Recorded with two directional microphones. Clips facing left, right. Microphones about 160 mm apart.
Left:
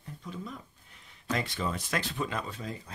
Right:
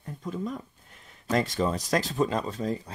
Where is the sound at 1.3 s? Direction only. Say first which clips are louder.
Right 7 dB; 40° right (ahead or behind).